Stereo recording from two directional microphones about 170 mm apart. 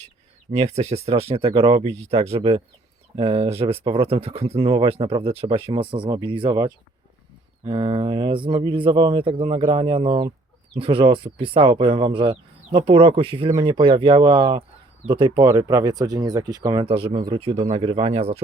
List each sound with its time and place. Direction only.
0.5 s speech: 40° right (ahead or behind)